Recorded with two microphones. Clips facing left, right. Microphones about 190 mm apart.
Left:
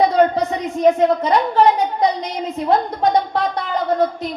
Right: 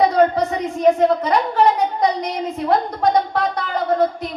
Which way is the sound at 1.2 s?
25° left (ahead or behind).